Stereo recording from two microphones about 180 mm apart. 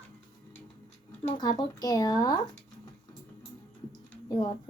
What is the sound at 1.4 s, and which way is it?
A woman's voice, 20° left (ahead or behind).